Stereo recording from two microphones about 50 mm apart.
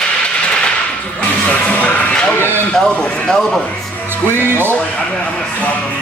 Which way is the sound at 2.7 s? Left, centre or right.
Centre.